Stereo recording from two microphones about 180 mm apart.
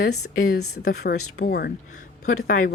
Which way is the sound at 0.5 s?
60° left (ahead or behind).